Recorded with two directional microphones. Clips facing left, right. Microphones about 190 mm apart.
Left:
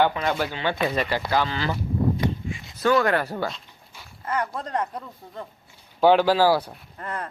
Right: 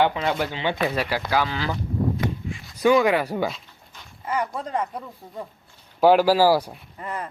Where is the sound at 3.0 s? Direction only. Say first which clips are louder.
Right 2 dB; 5° right (ahead or behind).